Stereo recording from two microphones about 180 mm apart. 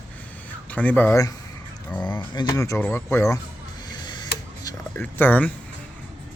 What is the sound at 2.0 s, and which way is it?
Speech, 25° left (ahead or behind).